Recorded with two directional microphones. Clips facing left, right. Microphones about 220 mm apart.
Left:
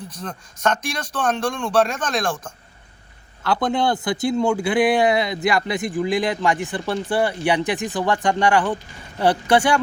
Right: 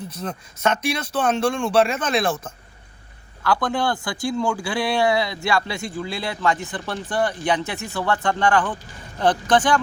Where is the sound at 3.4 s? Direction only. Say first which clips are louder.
Left 2 dB; 20° left (ahead or behind).